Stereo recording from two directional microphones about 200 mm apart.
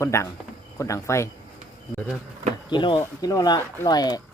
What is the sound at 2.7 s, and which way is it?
Speech, 25° left (ahead or behind).